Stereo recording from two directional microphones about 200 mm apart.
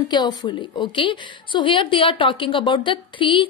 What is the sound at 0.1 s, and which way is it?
A woman's voice, 20° left (ahead or behind).